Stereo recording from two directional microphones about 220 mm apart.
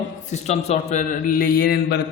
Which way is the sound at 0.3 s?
30° left (ahead or behind).